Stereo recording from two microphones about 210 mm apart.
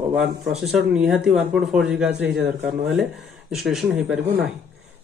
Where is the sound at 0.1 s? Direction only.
Centre (ahead or behind).